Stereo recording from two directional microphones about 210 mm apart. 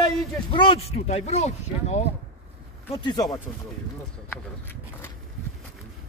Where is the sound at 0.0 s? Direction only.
25° left (ahead or behind).